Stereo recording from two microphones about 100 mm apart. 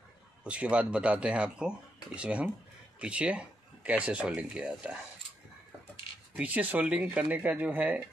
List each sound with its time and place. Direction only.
0.4 s speech: 10° right (ahead or behind)
6.3 s speech: 15° right (ahead or behind)